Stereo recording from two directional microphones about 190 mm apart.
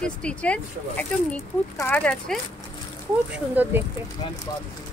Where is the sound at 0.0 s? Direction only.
5° left (ahead or behind).